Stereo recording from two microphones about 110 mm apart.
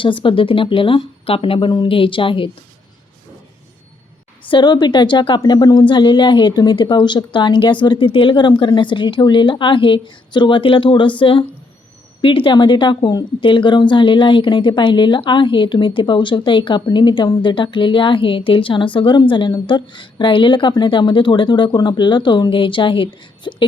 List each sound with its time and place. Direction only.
0.0 s a woman's voice: 50° left (ahead or behind)
4.4 s a woman's voice: 45° left (ahead or behind)